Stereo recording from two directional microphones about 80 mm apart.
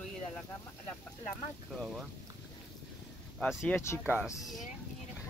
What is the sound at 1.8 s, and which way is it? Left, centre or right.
Speech, centre.